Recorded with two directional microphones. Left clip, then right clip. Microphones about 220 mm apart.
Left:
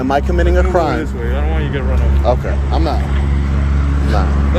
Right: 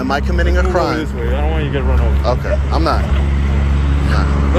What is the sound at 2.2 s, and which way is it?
Speech, 10° left (ahead or behind).